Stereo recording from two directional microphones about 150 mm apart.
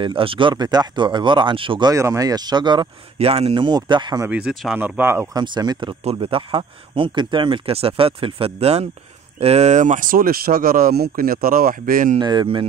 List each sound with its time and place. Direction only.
0.0 s speech: 35° right (ahead or behind)
3.2 s speech: 40° right (ahead or behind)
4.3 s speech: 5° right (ahead or behind)
5.4 s speech: 30° right (ahead or behind); by 12.2 s 65° right (ahead or behind)
12.2 s speech: 30° right (ahead or behind)